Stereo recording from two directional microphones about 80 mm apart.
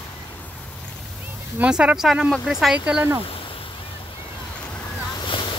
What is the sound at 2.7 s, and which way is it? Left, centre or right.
Speech, centre.